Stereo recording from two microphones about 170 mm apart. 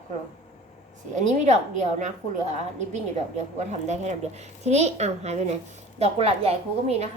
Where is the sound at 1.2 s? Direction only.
45° right (ahead or behind).